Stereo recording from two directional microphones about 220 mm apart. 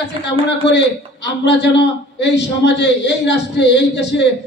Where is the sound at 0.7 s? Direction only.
55° left (ahead or behind).